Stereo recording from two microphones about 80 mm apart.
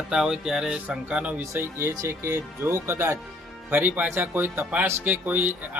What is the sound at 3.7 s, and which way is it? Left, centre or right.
Speech, right.